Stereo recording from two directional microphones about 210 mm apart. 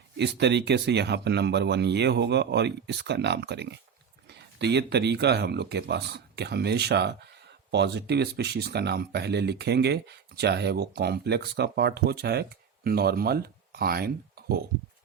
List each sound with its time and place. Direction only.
0.2 s speech: 55° right (ahead or behind)